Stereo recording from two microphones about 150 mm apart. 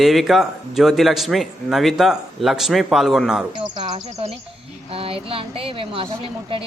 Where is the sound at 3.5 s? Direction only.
30° right (ahead or behind).